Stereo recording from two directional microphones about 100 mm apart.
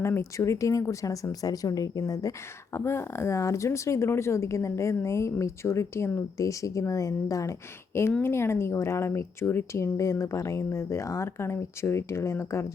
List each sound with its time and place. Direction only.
0.0 s speech: 30° left (ahead or behind)